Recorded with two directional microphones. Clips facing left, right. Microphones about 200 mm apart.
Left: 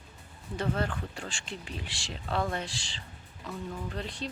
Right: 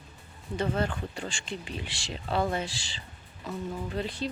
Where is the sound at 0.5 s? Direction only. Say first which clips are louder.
Right 2 dB; centre (ahead or behind).